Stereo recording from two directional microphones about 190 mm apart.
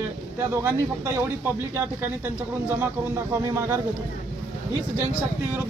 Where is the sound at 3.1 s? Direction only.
15° right (ahead or behind).